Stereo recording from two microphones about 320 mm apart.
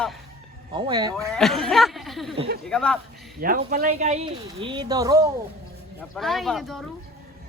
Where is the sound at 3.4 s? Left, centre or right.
Right; by 5.2 s centre.